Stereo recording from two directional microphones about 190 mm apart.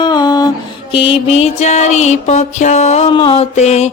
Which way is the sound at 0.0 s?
20° left (ahead or behind).